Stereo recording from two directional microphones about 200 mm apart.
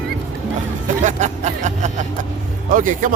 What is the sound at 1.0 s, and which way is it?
Speech, 35° right (ahead or behind).